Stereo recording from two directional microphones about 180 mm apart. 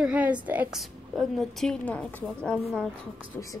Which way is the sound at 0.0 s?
5° right (ahead or behind).